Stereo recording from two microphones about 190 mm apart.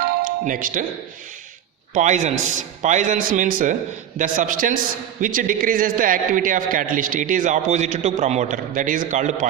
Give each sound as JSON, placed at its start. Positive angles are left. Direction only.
{"t": 0.2, "sound": "speech", "side_deg": -45}
{"t": 1.9, "sound": "a man's voice", "side_deg": -40}